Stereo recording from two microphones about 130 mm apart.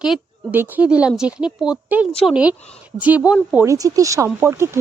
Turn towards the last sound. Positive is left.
turn(degrees=-20)  # may be behind; listen again after turning